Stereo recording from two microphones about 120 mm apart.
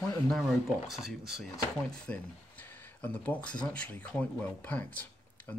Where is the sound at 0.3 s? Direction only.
Centre (ahead or behind).